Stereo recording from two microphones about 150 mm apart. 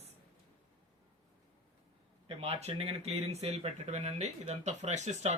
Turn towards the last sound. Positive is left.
turn(degrees=-50)  # may be behind; listen again after turning